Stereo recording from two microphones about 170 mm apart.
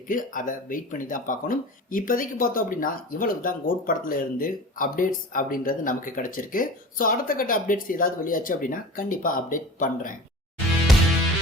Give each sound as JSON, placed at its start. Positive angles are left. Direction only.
{"t": 0.1, "sound": "speech", "side_deg": 50}